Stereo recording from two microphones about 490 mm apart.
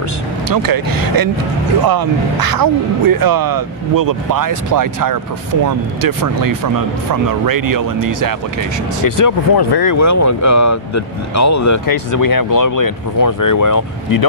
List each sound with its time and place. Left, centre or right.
0.5 s speech: right
9.0 s speech: left